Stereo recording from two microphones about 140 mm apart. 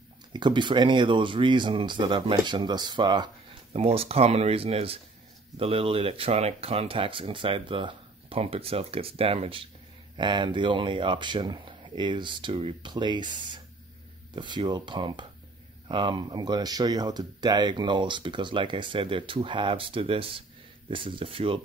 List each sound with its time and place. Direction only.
0.3 s speech: 35° right (ahead or behind)
3.7 s speech: 45° right (ahead or behind)